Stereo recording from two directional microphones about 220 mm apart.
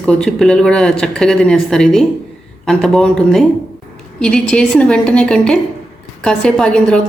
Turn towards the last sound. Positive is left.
turn(degrees=5)  # may be behind; listen again after turning